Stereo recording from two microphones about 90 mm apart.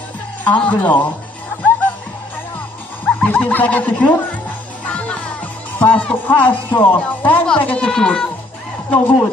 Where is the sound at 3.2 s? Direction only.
20° left (ahead or behind).